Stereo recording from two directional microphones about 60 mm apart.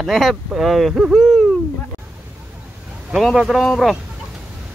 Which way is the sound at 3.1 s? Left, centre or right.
Centre.